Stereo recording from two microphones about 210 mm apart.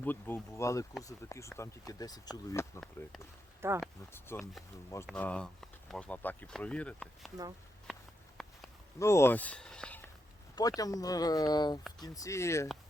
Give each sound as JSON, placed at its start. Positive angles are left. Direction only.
{"t": 0.0, "sound": "speech", "side_deg": 10}
{"t": 3.6, "sound": "speech", "side_deg": -10}
{"t": 4.3, "sound": "speech", "side_deg": 10}
{"t": 8.4, "sound": "a sound", "side_deg": 0}
{"t": 9.0, "sound": "speech", "side_deg": 15}
{"t": 10.5, "sound": "speech", "side_deg": 15}